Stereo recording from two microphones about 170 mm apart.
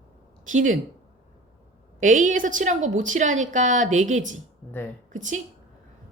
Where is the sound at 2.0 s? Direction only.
50° right (ahead or behind).